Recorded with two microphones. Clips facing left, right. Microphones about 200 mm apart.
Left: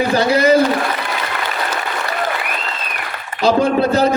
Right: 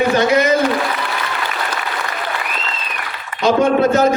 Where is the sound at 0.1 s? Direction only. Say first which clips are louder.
Left 1 dB; 35° left (ahead or behind).